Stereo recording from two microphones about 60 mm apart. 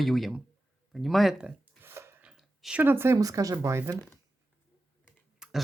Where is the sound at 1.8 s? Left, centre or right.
Right.